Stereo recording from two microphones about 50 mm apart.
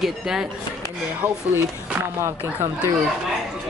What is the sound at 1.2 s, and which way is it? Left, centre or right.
Speech, right.